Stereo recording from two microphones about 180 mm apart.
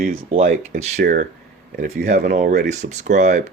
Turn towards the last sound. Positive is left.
turn(degrees=-45)  # may be behind; listen again after turning